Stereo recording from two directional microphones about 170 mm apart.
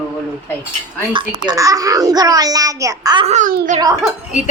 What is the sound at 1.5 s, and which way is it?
A child's voice, 20° right (ahead or behind).